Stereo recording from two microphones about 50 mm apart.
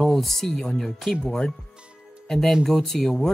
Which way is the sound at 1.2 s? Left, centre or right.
Centre.